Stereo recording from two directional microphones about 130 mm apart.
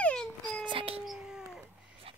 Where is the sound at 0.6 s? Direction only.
45° right (ahead or behind).